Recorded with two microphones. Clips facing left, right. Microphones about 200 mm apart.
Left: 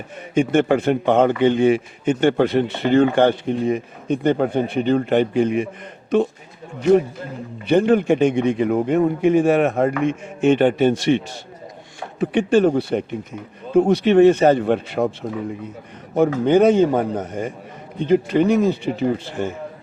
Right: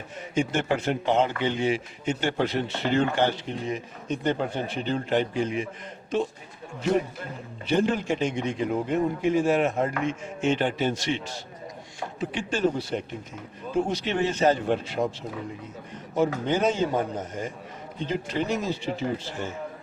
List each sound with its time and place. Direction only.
0.3 s a man's voice: 55° left (ahead or behind)
7.7 s a man's voice: 60° left (ahead or behind)
12.2 s a man's voice: 60° left (ahead or behind)
16.1 s a man's voice: 60° left (ahead or behind)